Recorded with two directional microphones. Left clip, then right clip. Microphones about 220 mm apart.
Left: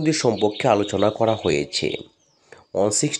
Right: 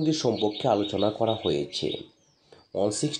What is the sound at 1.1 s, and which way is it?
Speech, 45° left (ahead or behind).